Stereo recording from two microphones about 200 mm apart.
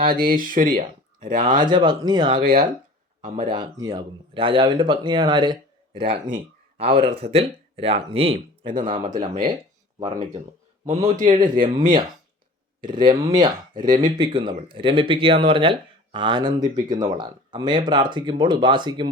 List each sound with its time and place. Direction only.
0.0 s speech: 50° right (ahead or behind)
1.4 s speech: 25° right (ahead or behind)
2.4 s speech: 50° right (ahead or behind)
3.5 s speech: 20° right (ahead or behind)
11.3 s speech: 25° right (ahead or behind)